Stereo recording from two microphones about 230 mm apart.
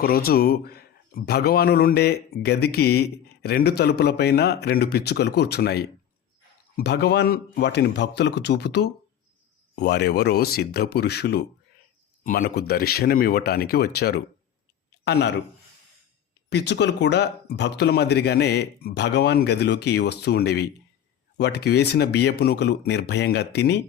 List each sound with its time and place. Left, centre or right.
0.0 s speech: left
16.5 s speech: left